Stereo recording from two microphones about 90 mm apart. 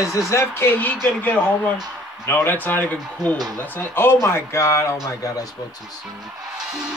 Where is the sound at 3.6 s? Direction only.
20° left (ahead or behind).